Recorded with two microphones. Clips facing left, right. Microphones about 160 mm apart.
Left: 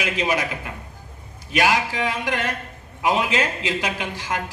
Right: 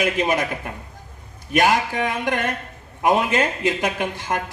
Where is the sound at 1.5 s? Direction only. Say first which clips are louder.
Right 2 dB; 50° right (ahead or behind).